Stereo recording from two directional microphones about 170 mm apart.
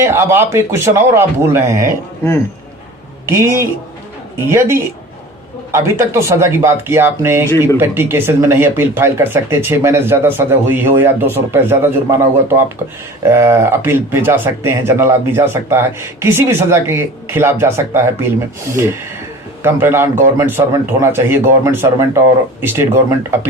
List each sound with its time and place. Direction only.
0.0 s speech: 15° right (ahead or behind)
3.2 s speech: 15° right (ahead or behind)